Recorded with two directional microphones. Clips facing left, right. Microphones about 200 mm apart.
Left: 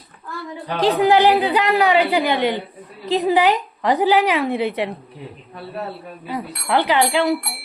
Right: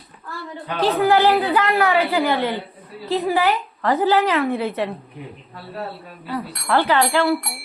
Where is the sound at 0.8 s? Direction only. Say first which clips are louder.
Left 2 dB; 15° left (ahead or behind).